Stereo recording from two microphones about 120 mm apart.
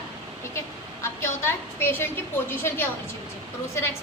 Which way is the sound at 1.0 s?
20° left (ahead or behind).